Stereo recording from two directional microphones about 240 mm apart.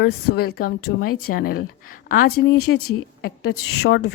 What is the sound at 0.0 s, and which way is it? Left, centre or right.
A woman's voice, left.